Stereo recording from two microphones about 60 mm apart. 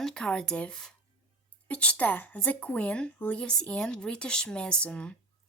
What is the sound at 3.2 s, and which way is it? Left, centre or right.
Speech, left.